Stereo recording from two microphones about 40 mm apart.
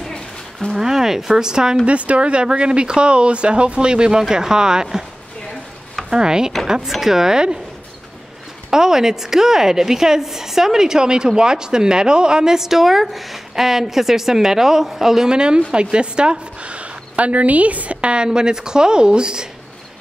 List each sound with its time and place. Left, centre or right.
0.0 s a sound: centre
0.7 s a woman's voice: centre
1.9 s a woman's voice: right; by 5.0 s centre
6.0 s a woman's voice: centre
6.9 s a woman's voice: centre
8.6 s a woman's voice: centre
15.3 s a woman's voice: right